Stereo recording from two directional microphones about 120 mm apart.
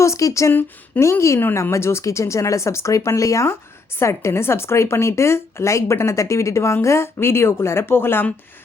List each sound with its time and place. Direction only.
0.0 s speech: 25° left (ahead or behind)